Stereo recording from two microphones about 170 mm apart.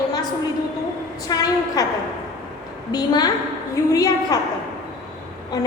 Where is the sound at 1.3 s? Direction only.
20° left (ahead or behind).